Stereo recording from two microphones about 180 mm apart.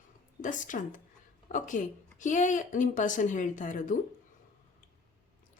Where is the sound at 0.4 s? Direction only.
45° left (ahead or behind).